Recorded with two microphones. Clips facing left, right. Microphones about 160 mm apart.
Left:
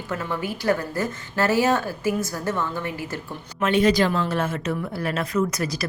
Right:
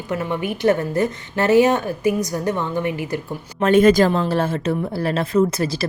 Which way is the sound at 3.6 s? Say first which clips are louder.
Right 6 dB; 45° right (ahead or behind).